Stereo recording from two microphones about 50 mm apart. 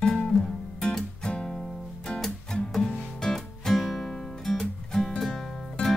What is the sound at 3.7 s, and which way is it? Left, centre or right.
Music, centre.